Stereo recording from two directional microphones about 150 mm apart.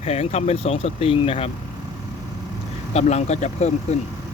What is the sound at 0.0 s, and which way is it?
Speech, 45° left (ahead or behind).